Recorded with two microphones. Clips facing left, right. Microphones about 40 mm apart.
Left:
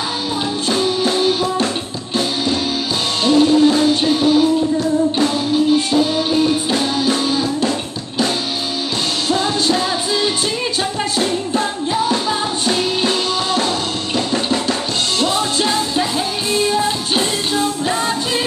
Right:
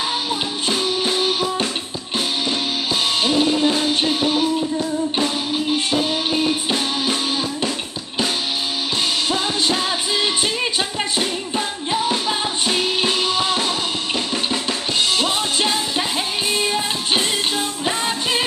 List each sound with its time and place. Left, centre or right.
0.7 s music: centre
3.3 s music: centre
9.3 s music: centre
15.1 s music: centre